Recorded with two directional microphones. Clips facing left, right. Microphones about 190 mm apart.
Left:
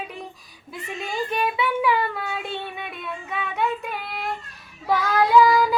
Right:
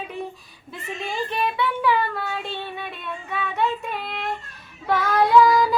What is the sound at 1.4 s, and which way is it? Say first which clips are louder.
Child singing: even; 10° left (ahead or behind).